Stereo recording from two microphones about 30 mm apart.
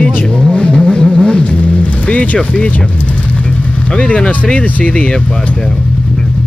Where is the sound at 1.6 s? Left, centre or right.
Left.